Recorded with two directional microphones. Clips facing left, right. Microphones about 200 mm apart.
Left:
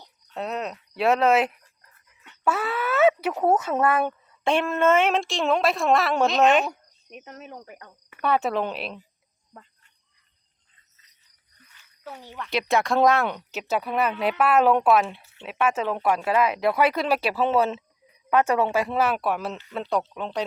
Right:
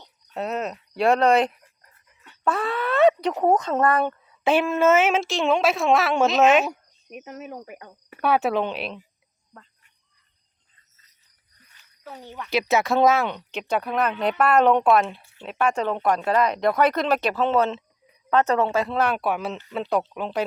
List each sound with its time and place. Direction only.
0.3 s speech: centre (ahead or behind)
7.6 s speech: 20° right (ahead or behind)
8.2 s speech: 5° right (ahead or behind)
12.4 s speech: centre (ahead or behind)